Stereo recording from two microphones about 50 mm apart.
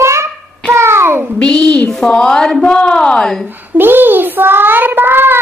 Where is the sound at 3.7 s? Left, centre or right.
Right.